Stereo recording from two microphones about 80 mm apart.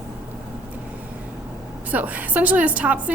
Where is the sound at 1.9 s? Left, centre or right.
Centre.